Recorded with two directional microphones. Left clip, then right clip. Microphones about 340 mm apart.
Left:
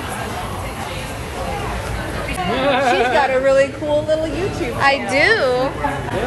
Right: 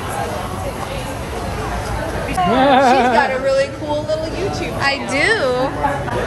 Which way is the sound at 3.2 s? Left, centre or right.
Left.